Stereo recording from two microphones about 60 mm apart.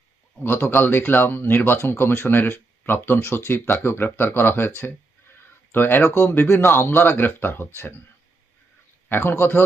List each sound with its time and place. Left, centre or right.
0.3 s speech: left
9.0 s speech: left